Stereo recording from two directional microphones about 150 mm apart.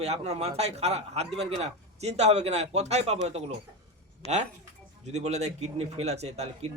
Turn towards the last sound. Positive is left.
turn(degrees=-45)  # may be behind; listen again after turning